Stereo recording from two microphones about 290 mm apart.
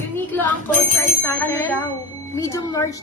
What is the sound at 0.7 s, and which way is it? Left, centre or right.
Speech, right.